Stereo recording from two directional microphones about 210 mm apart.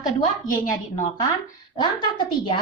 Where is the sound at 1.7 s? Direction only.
20° left (ahead or behind).